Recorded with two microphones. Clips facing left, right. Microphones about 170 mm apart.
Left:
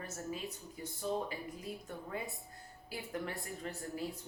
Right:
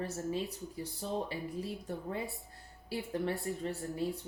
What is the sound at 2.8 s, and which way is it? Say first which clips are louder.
Speech: right 6 dB; 30° right (ahead or behind).